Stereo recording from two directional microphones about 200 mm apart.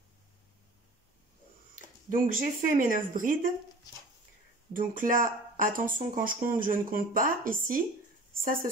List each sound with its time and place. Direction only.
2.0 s speech: 45° right (ahead or behind)
4.7 s speech: 45° right (ahead or behind)